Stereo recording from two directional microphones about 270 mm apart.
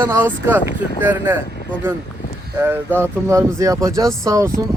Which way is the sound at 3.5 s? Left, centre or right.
Centre.